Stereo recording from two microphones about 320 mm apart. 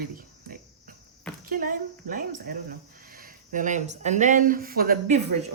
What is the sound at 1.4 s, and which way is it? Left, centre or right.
Speech, right.